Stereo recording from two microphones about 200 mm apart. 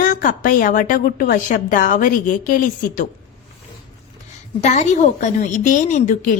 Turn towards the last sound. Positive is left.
turn(degrees=40)  # may be behind; listen again after turning